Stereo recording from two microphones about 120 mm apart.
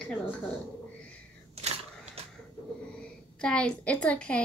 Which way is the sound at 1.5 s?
60° right (ahead or behind).